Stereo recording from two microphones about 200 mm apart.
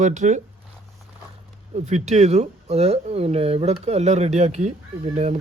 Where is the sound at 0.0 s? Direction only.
35° right (ahead or behind).